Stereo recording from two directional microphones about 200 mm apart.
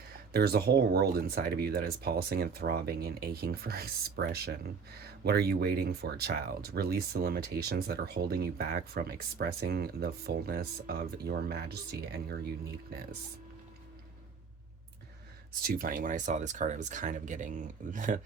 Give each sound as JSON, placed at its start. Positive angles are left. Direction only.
{"t": 0.3, "sound": "speech", "side_deg": -50}
{"t": 15.6, "sound": "speech", "side_deg": -45}